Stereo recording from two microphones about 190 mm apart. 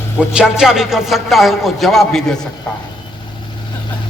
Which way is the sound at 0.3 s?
5° right (ahead or behind).